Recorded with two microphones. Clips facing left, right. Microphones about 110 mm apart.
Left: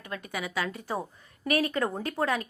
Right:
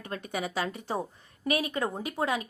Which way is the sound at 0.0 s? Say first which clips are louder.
Right 2 dB; 30° right (ahead or behind).